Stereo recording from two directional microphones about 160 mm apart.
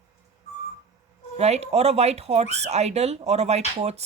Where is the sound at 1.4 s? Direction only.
40° right (ahead or behind).